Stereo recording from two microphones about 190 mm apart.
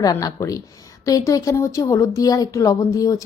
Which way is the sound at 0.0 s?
20° left (ahead or behind).